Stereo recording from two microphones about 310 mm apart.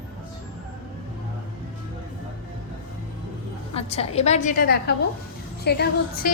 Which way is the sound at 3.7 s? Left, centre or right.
Centre.